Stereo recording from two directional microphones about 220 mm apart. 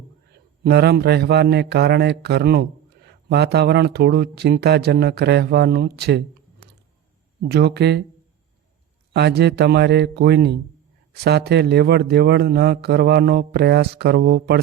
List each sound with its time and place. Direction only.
0.6 s a man's voice: 50° right (ahead or behind)
7.4 s a man's voice: 45° right (ahead or behind)
9.1 s a man's voice: 50° right (ahead or behind)